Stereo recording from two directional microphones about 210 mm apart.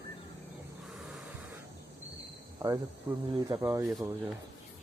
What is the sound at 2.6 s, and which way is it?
Cricket, 20° right (ahead or behind).